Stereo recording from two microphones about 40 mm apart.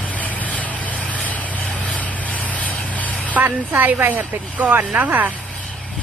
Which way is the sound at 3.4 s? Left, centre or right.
Right.